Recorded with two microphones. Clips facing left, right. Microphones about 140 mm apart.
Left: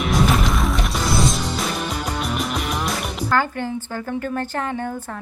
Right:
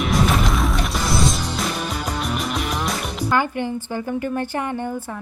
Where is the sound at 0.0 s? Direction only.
Centre (ahead or behind).